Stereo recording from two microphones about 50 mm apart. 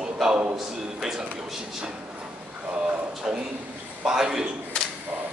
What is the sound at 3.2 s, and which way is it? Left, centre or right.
Speech, centre.